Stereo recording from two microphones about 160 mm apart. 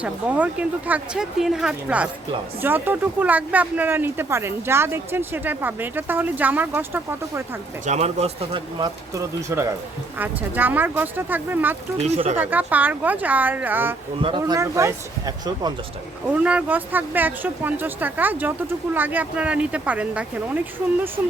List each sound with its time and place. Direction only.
0.0 s speech: 10° right (ahead or behind)
7.9 s speech: 45° right (ahead or behind)
9.1 s speech: 15° right (ahead or behind)
12.0 s speech: 45° right (ahead or behind)
12.4 s speech: 10° right (ahead or behind)
14.2 s speech: 30° right (ahead or behind)
16.3 s speech: 10° right (ahead or behind)